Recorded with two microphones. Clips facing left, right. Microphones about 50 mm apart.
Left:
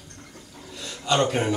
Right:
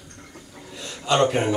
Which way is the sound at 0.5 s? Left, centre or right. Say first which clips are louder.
Right 1 dB; centre.